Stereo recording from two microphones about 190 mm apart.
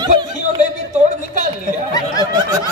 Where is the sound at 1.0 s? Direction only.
40° right (ahead or behind).